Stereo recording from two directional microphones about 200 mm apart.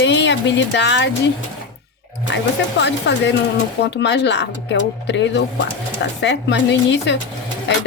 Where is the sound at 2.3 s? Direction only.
65° left (ahead or behind).